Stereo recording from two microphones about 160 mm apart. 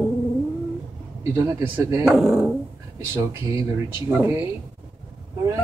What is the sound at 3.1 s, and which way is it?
Speech, 15° right (ahead or behind).